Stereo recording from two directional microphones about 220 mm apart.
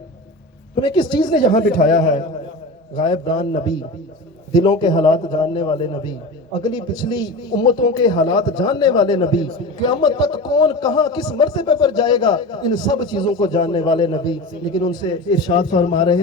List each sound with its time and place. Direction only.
0.8 s a man's voice: 20° left (ahead or behind)